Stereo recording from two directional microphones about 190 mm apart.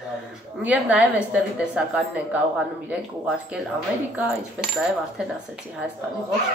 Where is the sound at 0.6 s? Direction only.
5° right (ahead or behind).